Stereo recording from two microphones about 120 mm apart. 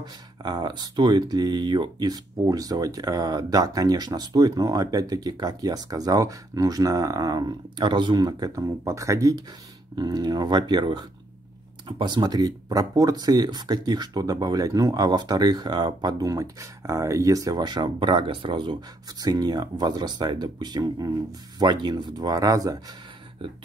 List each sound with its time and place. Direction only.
0.0 s speech: 35° right (ahead or behind)